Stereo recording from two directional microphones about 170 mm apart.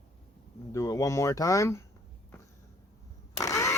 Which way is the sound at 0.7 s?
20° left (ahead or behind).